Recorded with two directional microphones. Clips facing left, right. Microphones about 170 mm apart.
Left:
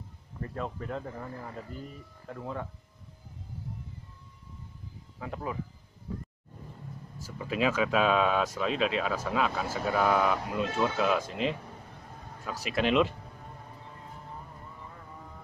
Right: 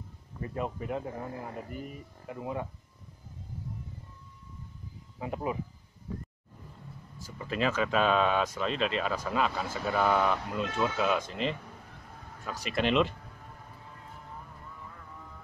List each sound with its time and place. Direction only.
0.4 s speech: 15° right (ahead or behind)
5.2 s speech: 20° right (ahead or behind)
7.2 s speech: 5° left (ahead or behind)